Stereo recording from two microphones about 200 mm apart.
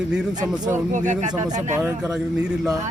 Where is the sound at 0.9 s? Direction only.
35° right (ahead or behind).